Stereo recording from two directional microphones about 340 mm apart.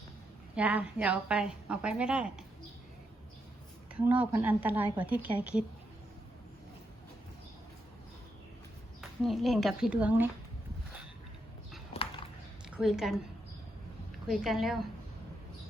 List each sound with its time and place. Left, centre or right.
0.5 s a woman's voice: centre
4.0 s a woman's voice: centre
9.0 s speech: centre
11.9 s a sound: centre
12.7 s a woman's voice: centre
14.3 s a woman's voice: centre